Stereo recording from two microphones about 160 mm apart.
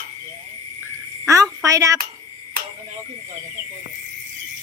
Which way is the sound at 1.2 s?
20° right (ahead or behind).